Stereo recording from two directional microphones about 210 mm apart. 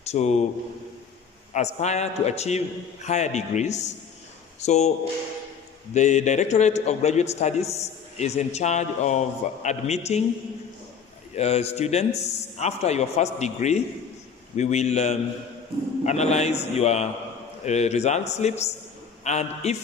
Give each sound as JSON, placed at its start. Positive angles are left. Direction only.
{"t": 0.0, "sound": "a man's voice", "side_deg": 30}
{"t": 1.5, "sound": "a man's voice", "side_deg": 35}
{"t": 5.9, "sound": "a man's voice", "side_deg": 35}
{"t": 11.3, "sound": "a man's voice", "side_deg": 30}